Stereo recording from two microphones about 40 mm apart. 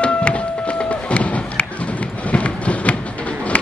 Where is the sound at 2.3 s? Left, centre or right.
Left.